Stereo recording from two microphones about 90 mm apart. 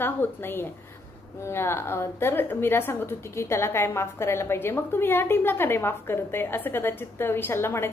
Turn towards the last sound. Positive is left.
turn(degrees=25)  # may be behind; listen again after turning